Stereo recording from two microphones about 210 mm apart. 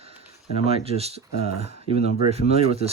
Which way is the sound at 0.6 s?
30° right (ahead or behind).